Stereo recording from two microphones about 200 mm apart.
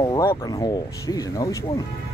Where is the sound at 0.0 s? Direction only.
15° left (ahead or behind).